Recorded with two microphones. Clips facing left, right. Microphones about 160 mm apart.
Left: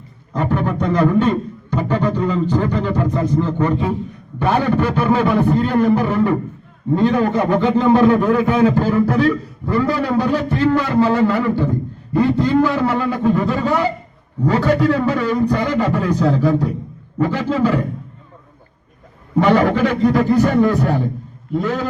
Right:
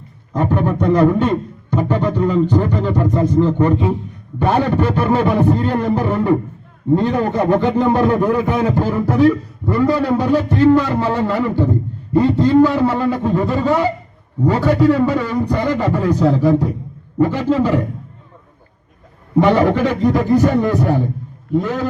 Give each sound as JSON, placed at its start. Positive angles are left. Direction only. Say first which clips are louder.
{"t": 0.3, "sound": "a sound", "louder": "right 2 dB", "side_deg": -20}
{"t": 1.8, "sound": "a man's voice", "louder": "right 1 dB", "side_deg": -15}
{"t": 19.4, "sound": "a man's voice", "louder": "right 1 dB", "side_deg": -20}